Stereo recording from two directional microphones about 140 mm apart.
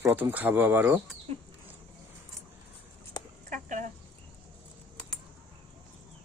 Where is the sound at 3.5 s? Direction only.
65° right (ahead or behind).